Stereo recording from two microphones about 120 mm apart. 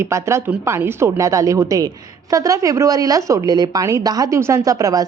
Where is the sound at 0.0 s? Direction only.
25° right (ahead or behind).